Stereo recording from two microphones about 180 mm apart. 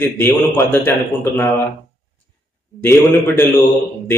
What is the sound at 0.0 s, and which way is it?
Speech, 15° left (ahead or behind).